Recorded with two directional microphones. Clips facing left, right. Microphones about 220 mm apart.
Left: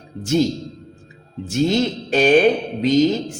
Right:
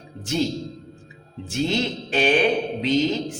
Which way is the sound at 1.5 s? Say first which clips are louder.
Left 5 dB; 45° left (ahead or behind).